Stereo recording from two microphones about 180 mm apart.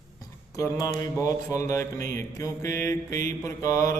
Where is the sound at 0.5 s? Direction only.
20° left (ahead or behind).